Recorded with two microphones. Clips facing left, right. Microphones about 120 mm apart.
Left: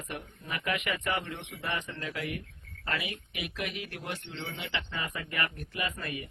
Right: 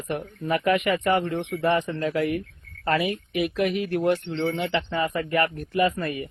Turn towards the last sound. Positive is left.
turn(degrees=-50)  # may be behind; listen again after turning